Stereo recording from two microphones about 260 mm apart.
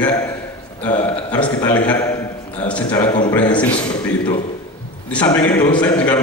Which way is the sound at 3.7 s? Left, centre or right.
Centre.